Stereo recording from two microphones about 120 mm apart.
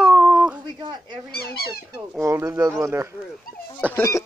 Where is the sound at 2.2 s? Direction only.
20° right (ahead or behind).